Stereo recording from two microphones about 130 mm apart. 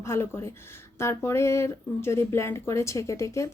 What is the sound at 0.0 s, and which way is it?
Speech, 20° left (ahead or behind).